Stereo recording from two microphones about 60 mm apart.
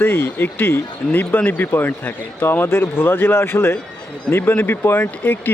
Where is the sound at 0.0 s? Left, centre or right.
Left.